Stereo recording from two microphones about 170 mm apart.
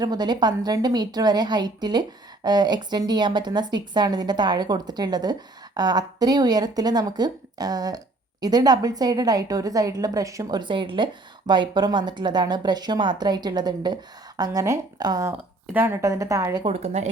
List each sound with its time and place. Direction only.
0.0 s a woman's voice: 25° right (ahead or behind)
16.6 s speech: 40° right (ahead or behind)